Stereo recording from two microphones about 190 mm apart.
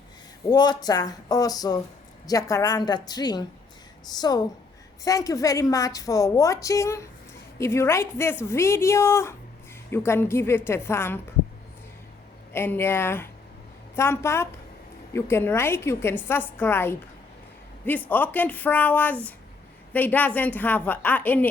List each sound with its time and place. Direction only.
0.5 s a woman's voice: 20° left (ahead or behind)
12.5 s a woman's voice: 10° left (ahead or behind)